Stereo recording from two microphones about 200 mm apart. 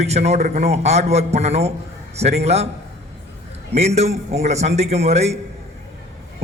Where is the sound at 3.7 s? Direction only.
35° right (ahead or behind).